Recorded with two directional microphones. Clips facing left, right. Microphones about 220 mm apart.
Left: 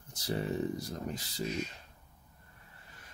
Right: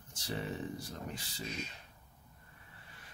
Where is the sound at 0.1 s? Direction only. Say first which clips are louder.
Left 5 dB; 40° left (ahead or behind).